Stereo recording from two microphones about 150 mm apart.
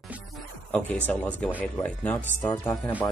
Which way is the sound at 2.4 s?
25° left (ahead or behind).